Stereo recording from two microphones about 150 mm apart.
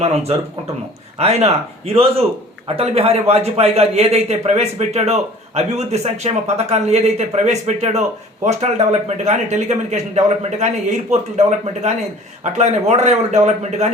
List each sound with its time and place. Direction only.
0.0 s speech: 45° right (ahead or behind)